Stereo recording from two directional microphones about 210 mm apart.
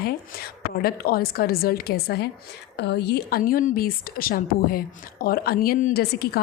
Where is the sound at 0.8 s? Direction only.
45° left (ahead or behind).